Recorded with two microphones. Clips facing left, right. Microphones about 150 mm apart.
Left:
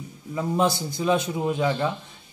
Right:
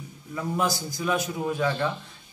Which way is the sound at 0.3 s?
25° left (ahead or behind).